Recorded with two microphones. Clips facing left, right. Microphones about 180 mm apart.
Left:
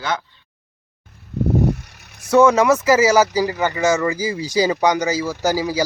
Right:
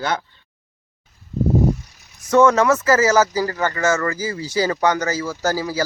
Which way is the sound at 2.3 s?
10° left (ahead or behind).